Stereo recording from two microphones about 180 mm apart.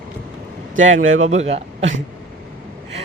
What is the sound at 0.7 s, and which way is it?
Speech, 90° right.